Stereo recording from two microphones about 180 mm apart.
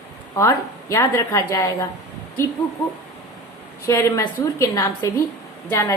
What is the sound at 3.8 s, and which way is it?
A woman's voice, 15° left (ahead or behind).